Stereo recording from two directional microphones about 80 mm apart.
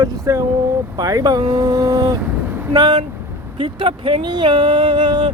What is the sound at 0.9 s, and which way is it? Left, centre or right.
Speech, right.